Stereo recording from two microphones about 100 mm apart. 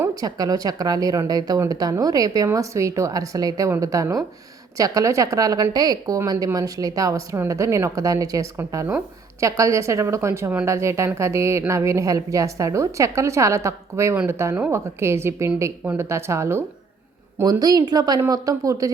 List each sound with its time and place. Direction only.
0.2 s a woman's voice: 40° right (ahead or behind)
17.4 s speech: 40° right (ahead or behind)